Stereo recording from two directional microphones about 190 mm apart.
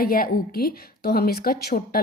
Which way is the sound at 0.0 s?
50° left (ahead or behind).